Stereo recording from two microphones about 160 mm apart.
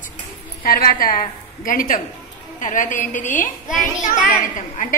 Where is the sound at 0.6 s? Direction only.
70° left (ahead or behind).